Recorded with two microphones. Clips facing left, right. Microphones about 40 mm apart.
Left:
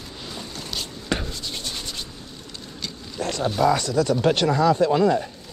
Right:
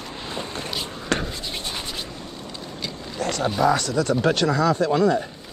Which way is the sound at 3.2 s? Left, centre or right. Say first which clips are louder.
Right 1 dB; right.